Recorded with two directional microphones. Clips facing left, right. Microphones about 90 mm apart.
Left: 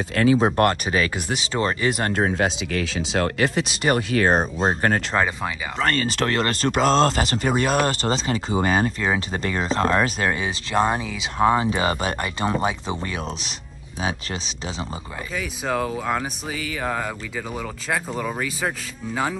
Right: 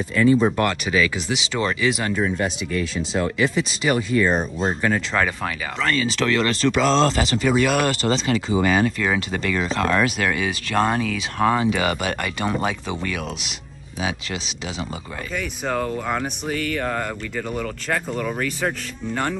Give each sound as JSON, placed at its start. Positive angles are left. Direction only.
{"t": 0.1, "sound": "speech", "side_deg": 85}
{"t": 0.6, "sound": "speech", "side_deg": 45}
{"t": 2.1, "sound": "speech", "side_deg": 85}
{"t": 3.3, "sound": "speech", "side_deg": 60}
{"t": 4.1, "sound": "speech", "side_deg": 85}
{"t": 4.6, "sound": "speech", "side_deg": 50}
{"t": 15.3, "sound": "speech", "side_deg": 5}